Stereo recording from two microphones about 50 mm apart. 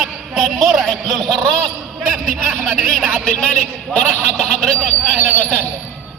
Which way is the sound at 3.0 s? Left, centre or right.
Right.